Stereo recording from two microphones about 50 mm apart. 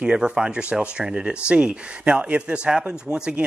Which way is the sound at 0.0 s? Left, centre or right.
Centre.